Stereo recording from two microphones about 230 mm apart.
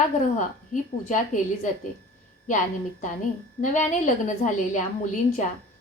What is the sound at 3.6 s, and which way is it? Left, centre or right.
A woman's voice, left.